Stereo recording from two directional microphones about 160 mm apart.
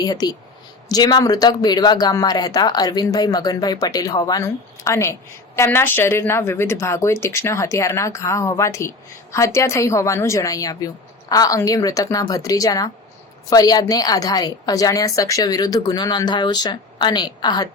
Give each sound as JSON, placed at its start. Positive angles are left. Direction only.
{"t": 0.0, "sound": "speech", "side_deg": 25}